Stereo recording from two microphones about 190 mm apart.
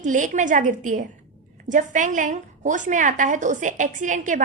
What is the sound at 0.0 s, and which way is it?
A woman's voice, 40° right (ahead or behind).